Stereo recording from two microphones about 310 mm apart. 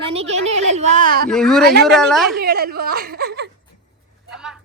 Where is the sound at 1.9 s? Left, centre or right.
Centre.